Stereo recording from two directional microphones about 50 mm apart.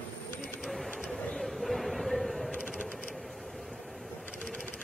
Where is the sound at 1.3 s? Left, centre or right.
Centre.